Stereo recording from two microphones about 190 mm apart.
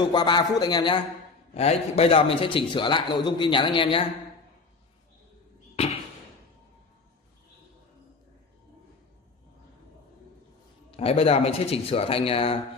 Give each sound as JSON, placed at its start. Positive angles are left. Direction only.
{"t": 0.0, "sound": "a man's voice", "side_deg": 20}
{"t": 5.8, "sound": "a sound", "side_deg": 30}
{"t": 10.9, "sound": "speech", "side_deg": 30}